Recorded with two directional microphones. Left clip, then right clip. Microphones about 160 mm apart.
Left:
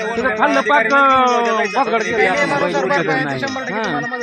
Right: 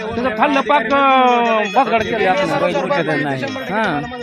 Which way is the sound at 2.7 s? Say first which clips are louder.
Left 1 dB; 15° right (ahead or behind).